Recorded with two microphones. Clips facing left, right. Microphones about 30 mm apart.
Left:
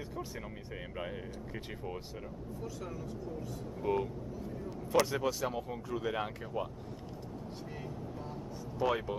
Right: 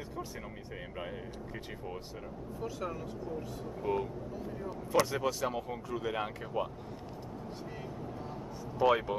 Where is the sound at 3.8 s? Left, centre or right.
Centre.